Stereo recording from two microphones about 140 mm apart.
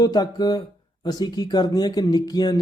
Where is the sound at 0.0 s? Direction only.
30° left (ahead or behind).